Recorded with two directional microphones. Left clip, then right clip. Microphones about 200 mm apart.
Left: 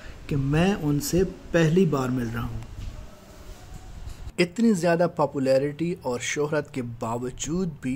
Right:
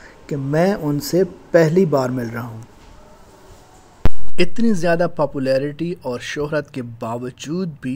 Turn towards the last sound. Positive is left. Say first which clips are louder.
# right 4 dB
turn(degrees=-10)  # may be behind; listen again after turning